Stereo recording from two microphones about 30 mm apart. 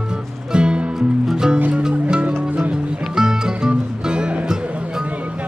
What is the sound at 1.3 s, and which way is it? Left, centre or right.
Music, right.